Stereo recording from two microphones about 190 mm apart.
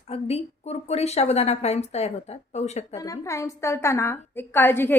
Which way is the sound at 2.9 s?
15° left (ahead or behind).